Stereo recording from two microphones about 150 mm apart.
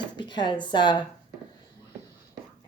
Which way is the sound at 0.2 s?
30° left (ahead or behind).